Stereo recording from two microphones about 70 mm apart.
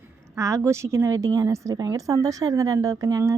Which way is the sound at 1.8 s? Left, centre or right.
Right.